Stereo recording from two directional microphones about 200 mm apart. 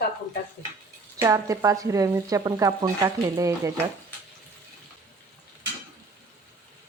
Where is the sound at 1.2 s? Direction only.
15° right (ahead or behind).